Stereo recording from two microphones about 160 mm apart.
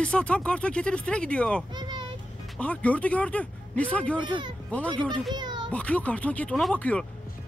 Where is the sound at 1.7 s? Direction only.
30° right (ahead or behind).